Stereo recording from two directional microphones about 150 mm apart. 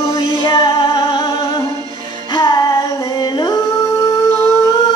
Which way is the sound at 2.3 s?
30° left (ahead or behind).